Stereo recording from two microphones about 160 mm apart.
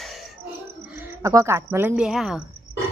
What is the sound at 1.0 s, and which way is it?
Speech, 15° right (ahead or behind).